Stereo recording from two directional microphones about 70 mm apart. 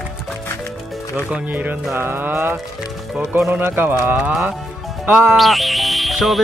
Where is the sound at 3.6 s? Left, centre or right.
Right.